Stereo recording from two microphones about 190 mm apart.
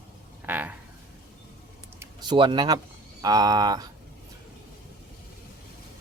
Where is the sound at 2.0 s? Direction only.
25° right (ahead or behind).